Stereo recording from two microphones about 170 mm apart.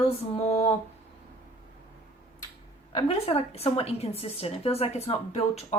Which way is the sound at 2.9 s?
35° left (ahead or behind).